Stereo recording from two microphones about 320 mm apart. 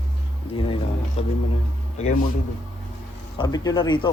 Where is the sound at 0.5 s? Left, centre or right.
Centre.